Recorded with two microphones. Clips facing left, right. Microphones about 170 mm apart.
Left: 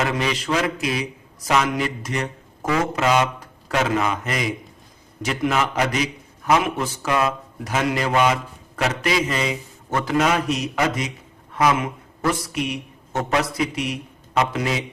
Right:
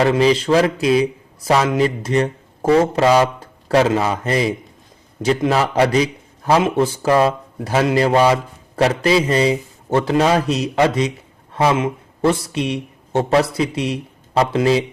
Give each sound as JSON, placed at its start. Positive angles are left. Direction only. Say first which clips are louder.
{"t": 0.0, "sound": "a man's voice", "louder": "right 9 dB", "side_deg": -30}